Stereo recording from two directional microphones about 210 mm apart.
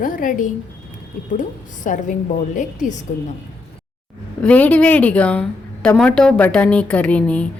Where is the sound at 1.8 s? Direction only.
35° left (ahead or behind).